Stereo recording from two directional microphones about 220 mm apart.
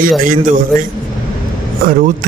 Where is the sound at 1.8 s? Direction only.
40° right (ahead or behind).